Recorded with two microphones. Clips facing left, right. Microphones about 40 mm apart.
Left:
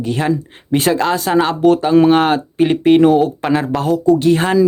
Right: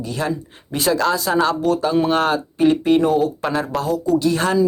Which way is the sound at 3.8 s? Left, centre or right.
Left.